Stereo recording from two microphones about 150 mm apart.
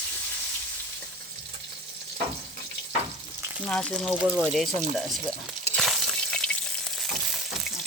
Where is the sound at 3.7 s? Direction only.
5° left (ahead or behind).